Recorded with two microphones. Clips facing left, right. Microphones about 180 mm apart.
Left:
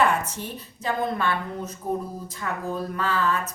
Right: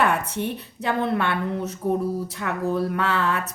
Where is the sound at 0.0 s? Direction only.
60° right (ahead or behind).